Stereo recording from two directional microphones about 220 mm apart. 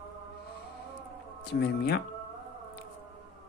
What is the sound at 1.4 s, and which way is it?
Speech, 50° left (ahead or behind).